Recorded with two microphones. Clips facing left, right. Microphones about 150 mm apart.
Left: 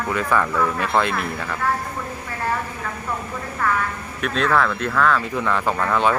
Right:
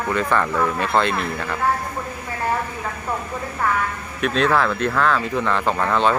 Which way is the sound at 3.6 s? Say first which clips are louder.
Even; 15° right (ahead or behind).